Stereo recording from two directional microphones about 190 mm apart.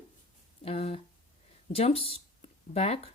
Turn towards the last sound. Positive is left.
turn(degrees=35)  # may be behind; listen again after turning